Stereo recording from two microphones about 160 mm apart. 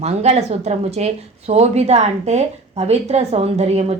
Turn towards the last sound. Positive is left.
turn(degrees=-40)  # may be behind; listen again after turning